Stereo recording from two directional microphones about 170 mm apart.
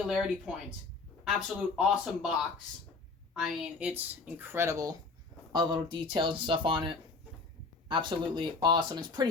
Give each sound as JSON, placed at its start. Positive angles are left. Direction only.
{"t": 0.0, "sound": "speech", "side_deg": -5}
{"t": 3.3, "sound": "speech", "side_deg": -5}